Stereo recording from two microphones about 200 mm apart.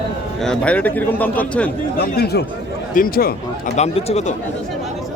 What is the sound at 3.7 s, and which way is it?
Speech, 30° left (ahead or behind).